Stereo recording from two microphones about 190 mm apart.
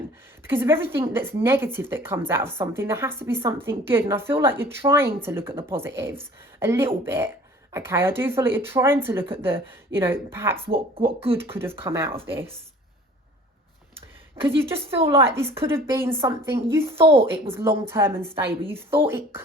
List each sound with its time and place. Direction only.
0.4 s a woman's voice: 10° right (ahead or behind)
10.9 s speech: 30° right (ahead or behind)
11.5 s a woman's voice: 10° right (ahead or behind)
14.9 s speech: 30° right (ahead or behind)
15.3 s a woman's voice: 10° right (ahead or behind)
17.0 s speech: 30° right (ahead or behind)
17.5 s a woman's voice: 15° right (ahead or behind)